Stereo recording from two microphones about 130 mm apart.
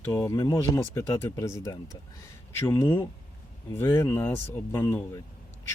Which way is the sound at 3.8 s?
20° left (ahead or behind).